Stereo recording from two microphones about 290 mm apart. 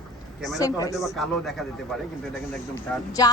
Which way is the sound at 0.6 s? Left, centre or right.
Centre.